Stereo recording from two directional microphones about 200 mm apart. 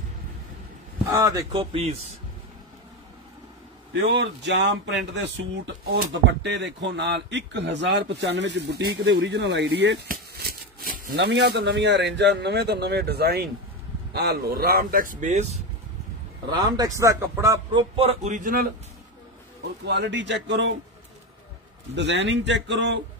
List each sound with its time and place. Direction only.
1.1 s speech: 15° right (ahead or behind)
3.9 s speech: 65° right (ahead or behind); by 15.5 s 35° right (ahead or behind)
16.4 s a man's voice: 20° right (ahead or behind)
17.9 s speech: 30° right (ahead or behind)
19.9 s speech: 65° right (ahead or behind)
21.9 s speech: 60° right (ahead or behind)